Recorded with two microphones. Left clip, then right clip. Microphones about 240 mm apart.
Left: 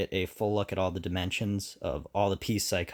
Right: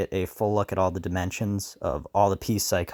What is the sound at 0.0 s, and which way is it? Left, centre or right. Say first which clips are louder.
Speech: right 4 dB; right.